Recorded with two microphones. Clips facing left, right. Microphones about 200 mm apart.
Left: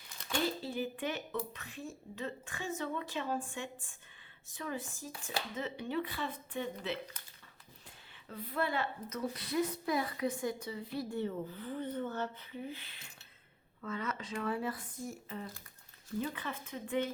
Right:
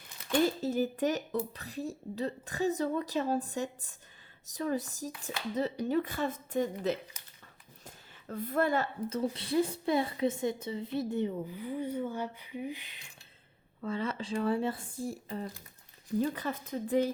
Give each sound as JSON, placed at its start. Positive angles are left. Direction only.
{"t": 0.4, "sound": "speech", "side_deg": -45}
{"t": 7.9, "sound": "a sound", "side_deg": -45}
{"t": 9.0, "sound": "a woman's voice", "side_deg": -30}
{"t": 13.8, "sound": "speech", "side_deg": -30}